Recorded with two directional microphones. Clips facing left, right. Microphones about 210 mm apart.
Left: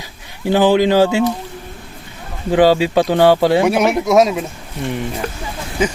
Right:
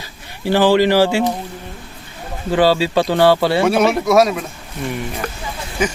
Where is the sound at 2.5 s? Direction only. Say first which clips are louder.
Left 3 dB; 15° left (ahead or behind).